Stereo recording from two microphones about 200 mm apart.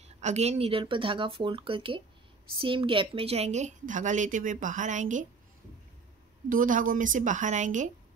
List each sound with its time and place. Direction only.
0.0 s a woman's voice: 35° right (ahead or behind)
6.5 s a woman's voice: 40° right (ahead or behind)